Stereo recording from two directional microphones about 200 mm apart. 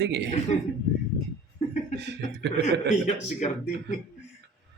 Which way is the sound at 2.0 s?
60° right (ahead or behind).